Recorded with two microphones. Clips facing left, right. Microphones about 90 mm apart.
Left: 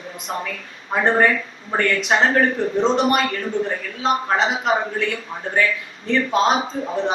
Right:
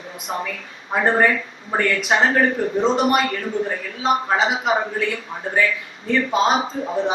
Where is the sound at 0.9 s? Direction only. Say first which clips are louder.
Even; centre (ahead or behind).